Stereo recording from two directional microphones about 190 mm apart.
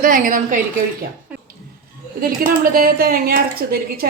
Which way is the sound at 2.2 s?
50° right (ahead or behind).